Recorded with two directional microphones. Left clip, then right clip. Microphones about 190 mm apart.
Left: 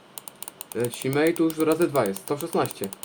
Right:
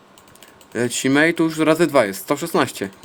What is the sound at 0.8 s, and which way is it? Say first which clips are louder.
Speech: right 7 dB; 55° right (ahead or behind).